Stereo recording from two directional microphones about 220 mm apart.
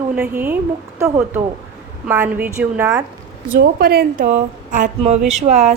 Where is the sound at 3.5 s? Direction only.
45° right (ahead or behind).